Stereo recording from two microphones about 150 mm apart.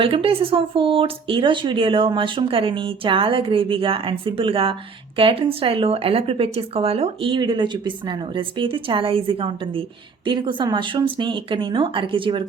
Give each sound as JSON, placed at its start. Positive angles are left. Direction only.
{"t": 0.0, "sound": "speech", "side_deg": -40}